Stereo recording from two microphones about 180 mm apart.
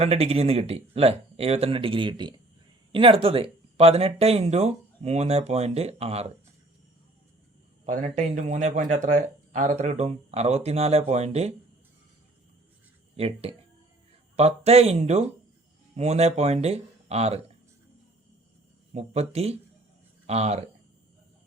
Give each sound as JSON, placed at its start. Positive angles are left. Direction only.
{"t": 0.0, "sound": "speech", "side_deg": -35}
{"t": 7.9, "sound": "speech", "side_deg": -40}
{"t": 13.1, "sound": "speech", "side_deg": -35}
{"t": 18.9, "sound": "speech", "side_deg": -35}